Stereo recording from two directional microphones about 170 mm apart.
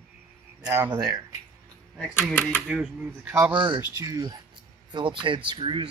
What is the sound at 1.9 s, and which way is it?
Speech, centre (ahead or behind).